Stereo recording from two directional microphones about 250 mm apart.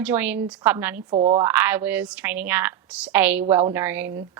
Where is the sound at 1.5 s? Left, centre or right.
Centre.